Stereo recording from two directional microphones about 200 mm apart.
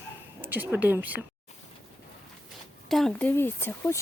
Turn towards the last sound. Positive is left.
turn(degrees=10)  # may be behind; listen again after turning